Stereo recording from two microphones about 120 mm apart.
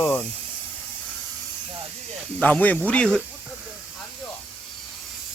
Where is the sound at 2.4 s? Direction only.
15° left (ahead or behind).